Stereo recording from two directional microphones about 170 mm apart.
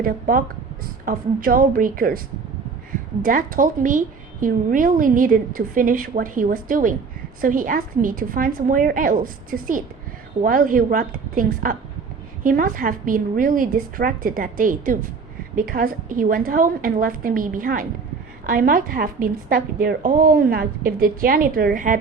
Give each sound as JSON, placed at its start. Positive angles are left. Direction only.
{"t": 0.0, "sound": "a woman's voice", "side_deg": -55}
{"t": 3.2, "sound": "a woman's voice", "side_deg": -55}